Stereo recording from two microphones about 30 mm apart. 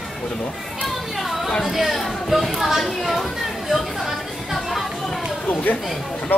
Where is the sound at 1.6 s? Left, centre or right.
Centre.